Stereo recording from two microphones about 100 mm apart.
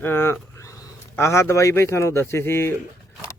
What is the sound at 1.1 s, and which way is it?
Speech, 30° left (ahead or behind).